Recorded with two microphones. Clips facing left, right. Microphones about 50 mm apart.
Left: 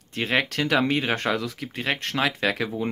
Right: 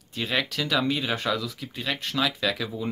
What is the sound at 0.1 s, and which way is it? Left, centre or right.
Speech, left.